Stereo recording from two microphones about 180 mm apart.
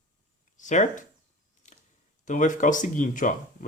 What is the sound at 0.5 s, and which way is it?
Speech, 45° left (ahead or behind).